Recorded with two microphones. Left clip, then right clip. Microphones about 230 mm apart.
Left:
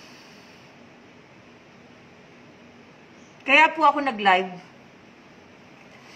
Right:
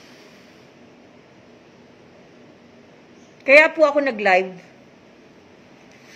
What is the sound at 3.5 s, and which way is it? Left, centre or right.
Speech, centre.